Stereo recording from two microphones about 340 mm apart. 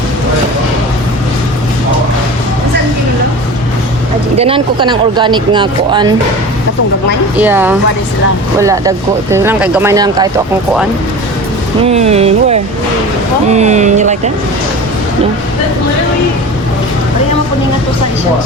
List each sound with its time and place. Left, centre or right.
4.4 s speech: centre
7.3 s a woman's voice: centre
11.8 s speech: centre